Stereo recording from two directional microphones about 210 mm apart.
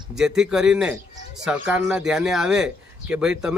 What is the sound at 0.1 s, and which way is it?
Speech, 5° right (ahead or behind).